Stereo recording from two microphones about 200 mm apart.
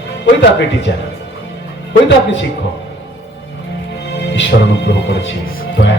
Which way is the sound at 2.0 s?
60° left (ahead or behind).